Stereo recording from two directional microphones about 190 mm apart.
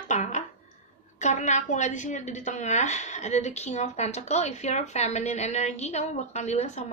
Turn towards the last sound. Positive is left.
turn(degrees=35)  # may be behind; listen again after turning